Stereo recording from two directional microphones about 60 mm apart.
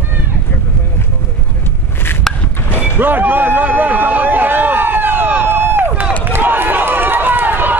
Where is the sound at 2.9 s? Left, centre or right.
Right.